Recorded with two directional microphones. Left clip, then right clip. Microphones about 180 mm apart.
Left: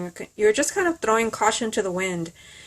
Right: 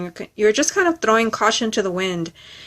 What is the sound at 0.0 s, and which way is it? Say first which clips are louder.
Speech: right 3 dB; 15° right (ahead or behind).